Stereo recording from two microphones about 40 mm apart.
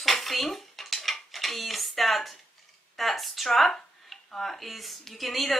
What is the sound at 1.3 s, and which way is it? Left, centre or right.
A woman's voice, centre.